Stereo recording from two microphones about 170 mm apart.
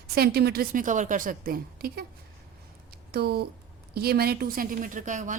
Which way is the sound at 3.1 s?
65° right (ahead or behind).